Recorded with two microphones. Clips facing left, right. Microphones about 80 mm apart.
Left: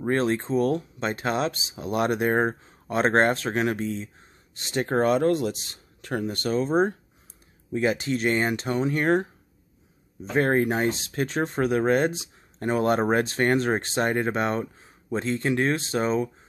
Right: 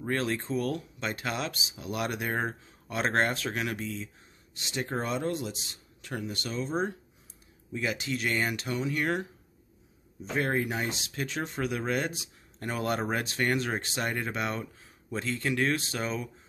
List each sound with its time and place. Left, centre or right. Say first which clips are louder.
0.0 s speech: left 7 dB; left
10.3 s speech: left 7 dB; left